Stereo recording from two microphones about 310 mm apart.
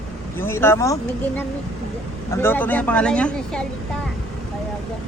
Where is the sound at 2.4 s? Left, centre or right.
Centre.